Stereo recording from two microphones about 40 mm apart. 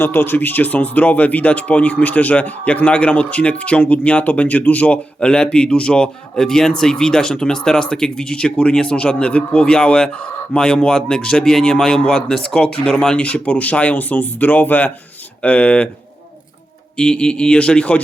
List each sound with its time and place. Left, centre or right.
0.0 s speech: left
5.2 s speech: left
12.1 s speech: centre
12.5 s speech: left
17.0 s speech: left